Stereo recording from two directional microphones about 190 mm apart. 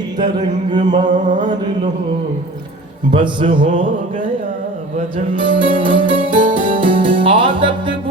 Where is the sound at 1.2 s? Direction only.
40° right (ahead or behind).